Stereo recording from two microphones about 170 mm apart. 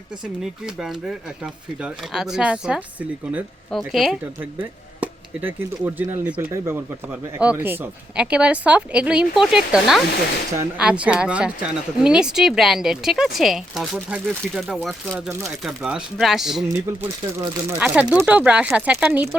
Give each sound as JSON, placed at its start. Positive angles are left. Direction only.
{"t": 0.6, "sound": "speech", "side_deg": -5}
{"t": 4.9, "sound": "speech", "side_deg": -10}
{"t": 17.4, "sound": "speech", "side_deg": -15}